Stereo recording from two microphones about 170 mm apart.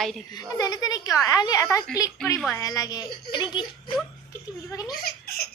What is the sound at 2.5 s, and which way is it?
Speech, 20° left (ahead or behind).